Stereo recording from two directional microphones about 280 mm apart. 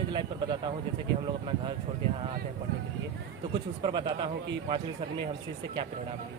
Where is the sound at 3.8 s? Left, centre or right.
Centre.